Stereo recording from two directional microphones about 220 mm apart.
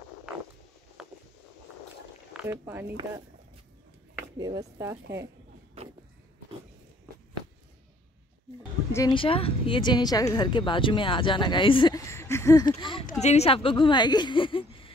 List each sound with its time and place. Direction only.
1.0 s a sound: centre (ahead or behind)
2.3 s speech: 10° right (ahead or behind)
8.9 s a woman's voice: 20° left (ahead or behind)